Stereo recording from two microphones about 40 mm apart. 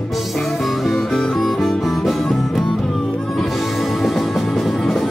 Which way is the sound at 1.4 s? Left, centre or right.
Centre.